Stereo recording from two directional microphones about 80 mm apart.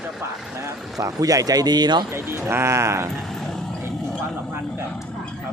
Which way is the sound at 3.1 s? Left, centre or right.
Centre.